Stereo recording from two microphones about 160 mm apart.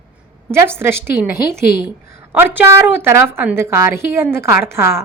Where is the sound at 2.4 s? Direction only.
15° right (ahead or behind).